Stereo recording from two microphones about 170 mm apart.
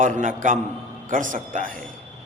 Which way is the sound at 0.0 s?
50° right (ahead or behind).